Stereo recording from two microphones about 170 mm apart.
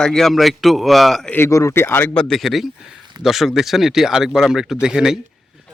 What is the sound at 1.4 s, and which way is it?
A man's voice, 20° left (ahead or behind).